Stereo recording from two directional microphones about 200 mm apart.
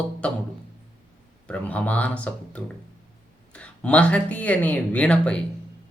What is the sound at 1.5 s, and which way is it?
Speech, 5° left (ahead or behind).